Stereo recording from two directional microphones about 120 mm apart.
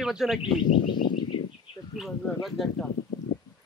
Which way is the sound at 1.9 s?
Centre (ahead or behind).